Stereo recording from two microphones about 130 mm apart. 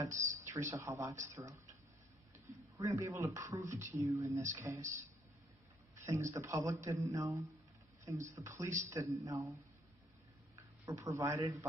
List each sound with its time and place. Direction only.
0.0 s speech: 25° right (ahead or behind)
2.8 s speech: 25° right (ahead or behind)
6.0 s speech: 25° right (ahead or behind)
11.1 s speech: 20° right (ahead or behind)